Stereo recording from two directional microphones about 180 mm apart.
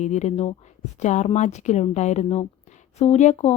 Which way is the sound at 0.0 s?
40° left (ahead or behind).